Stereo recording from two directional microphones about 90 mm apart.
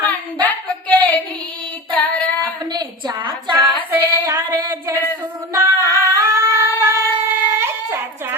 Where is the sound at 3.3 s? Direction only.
65° right (ahead or behind).